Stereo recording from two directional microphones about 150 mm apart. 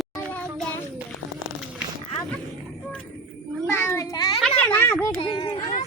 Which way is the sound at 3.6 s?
15° left (ahead or behind).